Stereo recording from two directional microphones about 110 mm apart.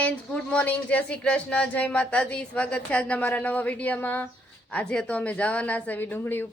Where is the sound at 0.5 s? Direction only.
15° left (ahead or behind).